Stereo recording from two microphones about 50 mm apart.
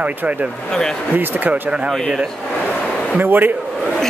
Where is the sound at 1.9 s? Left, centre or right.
Centre.